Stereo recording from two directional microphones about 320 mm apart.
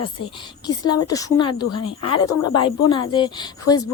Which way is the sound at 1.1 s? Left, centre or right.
Centre.